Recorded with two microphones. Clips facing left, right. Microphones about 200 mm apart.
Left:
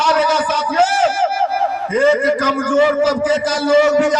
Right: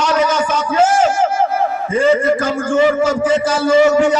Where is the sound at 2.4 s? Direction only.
40° left (ahead or behind).